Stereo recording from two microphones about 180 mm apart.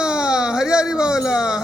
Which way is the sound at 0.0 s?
5° right (ahead or behind).